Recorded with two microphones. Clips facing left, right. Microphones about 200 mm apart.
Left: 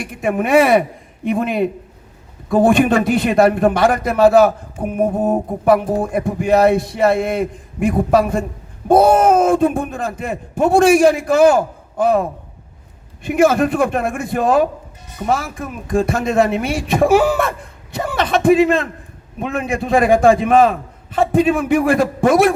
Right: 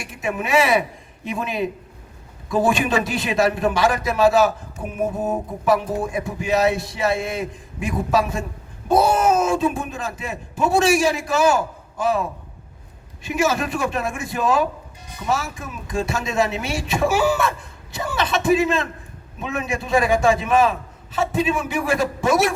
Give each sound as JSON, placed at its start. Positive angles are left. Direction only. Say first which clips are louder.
{"t": 0.0, "sound": "a man's voice", "louder": "left 7 dB", "side_deg": 55}